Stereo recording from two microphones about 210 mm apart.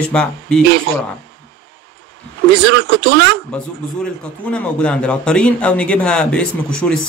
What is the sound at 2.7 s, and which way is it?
Speech, 55° right (ahead or behind).